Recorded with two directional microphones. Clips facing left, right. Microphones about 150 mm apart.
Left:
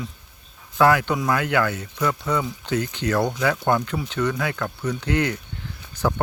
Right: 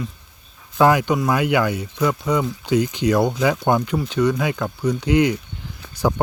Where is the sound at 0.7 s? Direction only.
15° right (ahead or behind).